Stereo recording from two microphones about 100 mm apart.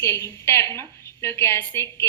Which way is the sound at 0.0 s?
25° left (ahead or behind).